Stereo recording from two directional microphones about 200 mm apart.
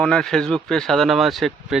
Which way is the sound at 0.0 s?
5° left (ahead or behind).